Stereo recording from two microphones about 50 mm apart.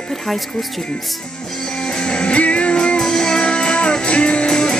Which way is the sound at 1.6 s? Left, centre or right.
Centre.